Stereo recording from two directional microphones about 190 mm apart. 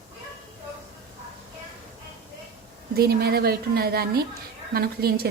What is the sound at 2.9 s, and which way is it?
A woman's voice, 55° right (ahead or behind).